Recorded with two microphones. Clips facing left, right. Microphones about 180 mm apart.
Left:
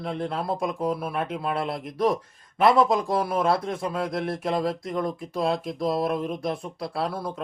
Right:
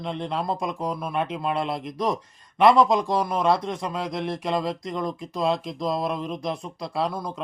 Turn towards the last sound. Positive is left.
turn(degrees=5)  # may be behind; listen again after turning